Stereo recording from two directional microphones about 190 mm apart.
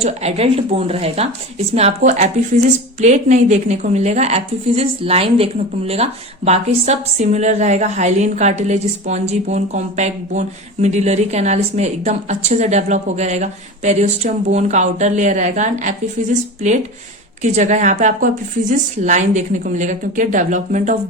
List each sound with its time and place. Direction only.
0.0 s speech: 35° right (ahead or behind)
17.4 s speech: 40° right (ahead or behind)